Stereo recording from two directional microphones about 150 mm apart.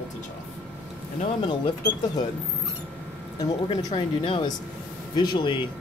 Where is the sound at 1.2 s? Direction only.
35° left (ahead or behind).